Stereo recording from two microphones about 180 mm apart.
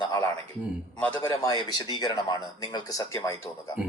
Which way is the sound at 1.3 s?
20° left (ahead or behind).